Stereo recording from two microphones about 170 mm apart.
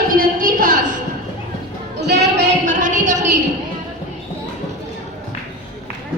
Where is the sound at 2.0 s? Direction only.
80° right.